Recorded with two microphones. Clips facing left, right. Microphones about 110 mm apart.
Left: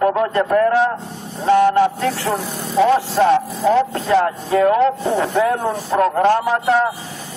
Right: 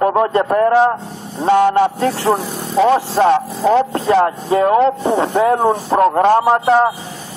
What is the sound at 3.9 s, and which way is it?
Speech, 30° right (ahead or behind).